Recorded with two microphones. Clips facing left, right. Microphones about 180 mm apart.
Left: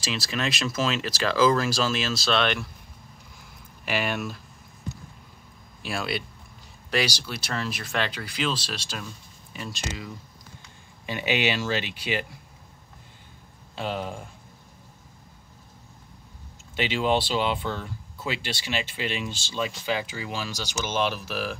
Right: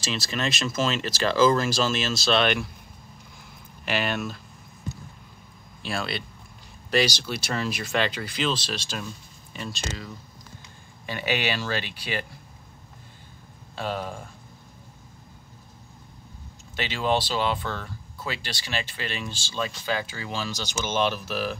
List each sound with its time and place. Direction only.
0.3 s speech: centre (ahead or behind)
3.8 s speech: 5° left (ahead or behind)
5.8 s speech: 10° left (ahead or behind)
13.7 s speech: 15° left (ahead or behind)
16.7 s speech: 20° left (ahead or behind); by 21.5 s 5° left (ahead or behind)